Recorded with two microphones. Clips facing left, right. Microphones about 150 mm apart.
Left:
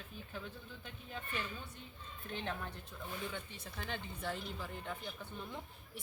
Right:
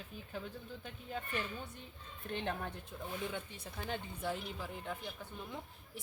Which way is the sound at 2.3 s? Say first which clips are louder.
Right 3 dB; 55° right (ahead or behind).